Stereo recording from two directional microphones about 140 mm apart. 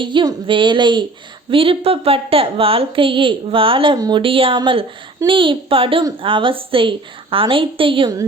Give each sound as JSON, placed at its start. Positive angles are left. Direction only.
{"t": 0.0, "sound": "a woman's voice", "side_deg": -35}
{"t": 3.9, "sound": "speech", "side_deg": -25}
{"t": 4.2, "sound": "a woman's voice", "side_deg": -40}